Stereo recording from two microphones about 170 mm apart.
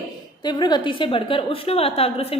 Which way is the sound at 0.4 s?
25° left (ahead or behind).